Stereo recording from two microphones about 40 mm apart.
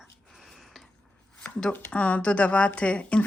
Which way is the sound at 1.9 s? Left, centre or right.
Left.